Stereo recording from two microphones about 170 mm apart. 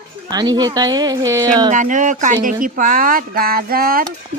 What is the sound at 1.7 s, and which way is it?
Speech, 50° right (ahead or behind).